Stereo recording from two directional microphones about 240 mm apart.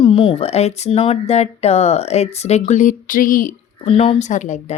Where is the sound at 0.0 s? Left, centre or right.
Left.